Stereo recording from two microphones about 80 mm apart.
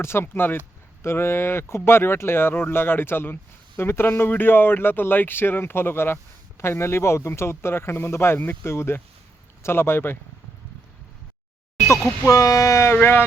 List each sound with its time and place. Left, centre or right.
0.0 s a man's voice: left
12.3 s speech: left
12.9 s a man's voice: left